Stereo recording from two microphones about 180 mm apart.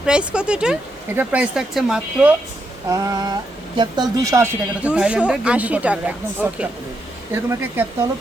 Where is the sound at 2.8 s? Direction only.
20° right (ahead or behind).